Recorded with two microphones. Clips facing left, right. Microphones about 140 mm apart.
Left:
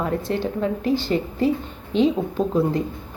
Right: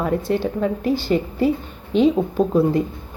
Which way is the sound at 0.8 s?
25° left (ahead or behind).